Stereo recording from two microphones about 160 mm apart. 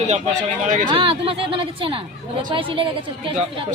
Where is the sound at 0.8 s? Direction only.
35° right (ahead or behind).